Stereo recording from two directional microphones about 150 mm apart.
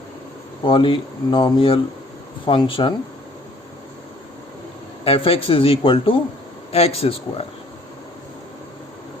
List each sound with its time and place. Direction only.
0.6 s speech: 35° left (ahead or behind)
5.0 s speech: 40° left (ahead or behind)